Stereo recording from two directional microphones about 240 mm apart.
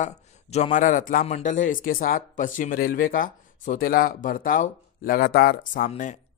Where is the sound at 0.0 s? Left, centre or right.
Left.